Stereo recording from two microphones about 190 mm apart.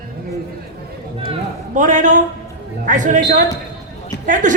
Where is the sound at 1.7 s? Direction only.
40° right (ahead or behind).